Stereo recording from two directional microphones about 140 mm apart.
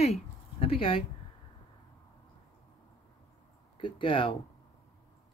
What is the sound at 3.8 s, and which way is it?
Speech, 35° left (ahead or behind).